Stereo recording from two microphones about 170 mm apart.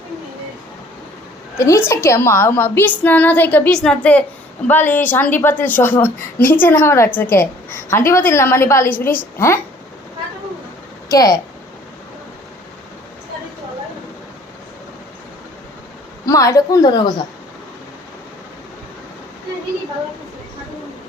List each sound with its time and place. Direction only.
1.5 s a woman's voice: 15° left (ahead or behind)
11.1 s a woman's voice: 20° left (ahead or behind)
16.2 s a woman's voice: 20° left (ahead or behind)